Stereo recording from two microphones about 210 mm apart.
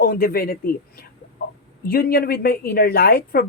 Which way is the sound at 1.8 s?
45° left (ahead or behind).